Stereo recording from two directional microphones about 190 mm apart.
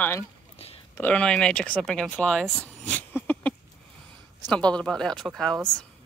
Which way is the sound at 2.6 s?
5° left (ahead or behind).